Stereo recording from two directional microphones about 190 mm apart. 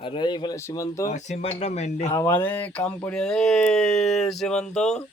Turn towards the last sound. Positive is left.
turn(degrees=5)  # may be behind; listen again after turning